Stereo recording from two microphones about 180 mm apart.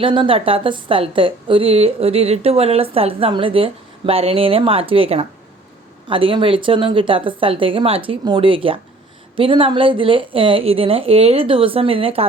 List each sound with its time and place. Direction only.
0.0 s a woman's voice: 30° right (ahead or behind)